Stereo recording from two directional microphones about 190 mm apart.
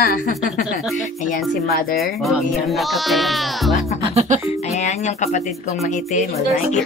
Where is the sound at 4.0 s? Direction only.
35° right (ahead or behind).